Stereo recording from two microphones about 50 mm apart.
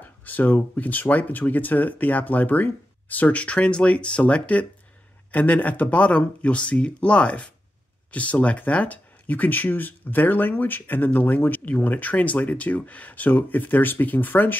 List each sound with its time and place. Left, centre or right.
0.2 s speech: left